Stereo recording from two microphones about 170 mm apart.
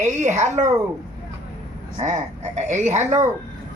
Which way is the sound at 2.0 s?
40° right (ahead or behind).